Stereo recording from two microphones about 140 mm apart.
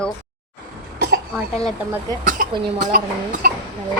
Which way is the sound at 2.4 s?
80° right.